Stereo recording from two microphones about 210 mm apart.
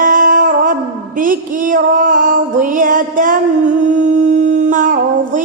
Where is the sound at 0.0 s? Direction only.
40° right (ahead or behind).